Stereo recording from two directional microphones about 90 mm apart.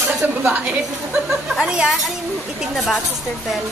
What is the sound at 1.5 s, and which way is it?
Speech, 5° right (ahead or behind).